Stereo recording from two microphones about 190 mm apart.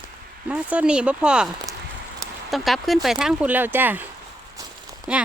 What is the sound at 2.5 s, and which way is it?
Speech, centre (ahead or behind).